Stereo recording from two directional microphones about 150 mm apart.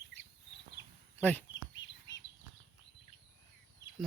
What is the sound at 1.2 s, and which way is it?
Speech, 10° left (ahead or behind).